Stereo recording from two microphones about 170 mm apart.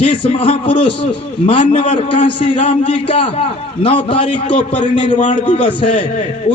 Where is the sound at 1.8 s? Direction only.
30° left (ahead or behind).